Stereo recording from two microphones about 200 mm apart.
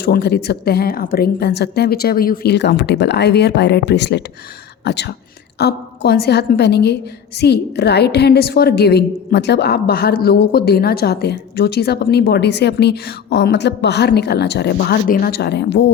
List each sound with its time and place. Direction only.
0.0 s a woman's voice: 55° left (ahead or behind)